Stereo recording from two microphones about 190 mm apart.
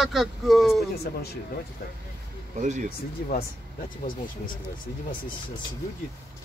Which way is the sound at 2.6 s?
40° right (ahead or behind).